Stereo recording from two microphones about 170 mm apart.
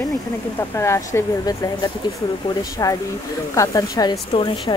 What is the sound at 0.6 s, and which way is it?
A woman's voice, 15° left (ahead or behind).